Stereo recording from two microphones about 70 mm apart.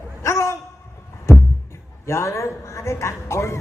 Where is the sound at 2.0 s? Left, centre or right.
Left.